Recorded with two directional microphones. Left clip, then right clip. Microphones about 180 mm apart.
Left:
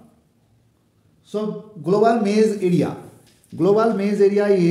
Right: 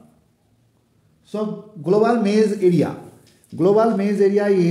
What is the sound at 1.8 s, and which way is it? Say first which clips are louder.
A man's voice: even; 25° right (ahead or behind).